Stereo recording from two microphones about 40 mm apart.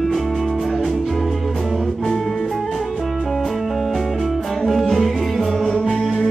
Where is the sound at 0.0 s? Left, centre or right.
Centre.